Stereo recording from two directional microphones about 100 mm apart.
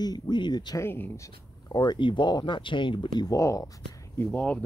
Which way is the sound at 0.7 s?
20° left (ahead or behind).